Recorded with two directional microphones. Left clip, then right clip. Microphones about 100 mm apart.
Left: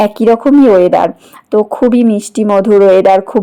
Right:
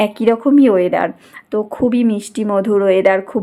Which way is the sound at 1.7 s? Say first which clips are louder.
Left 6 dB; 35° left (ahead or behind).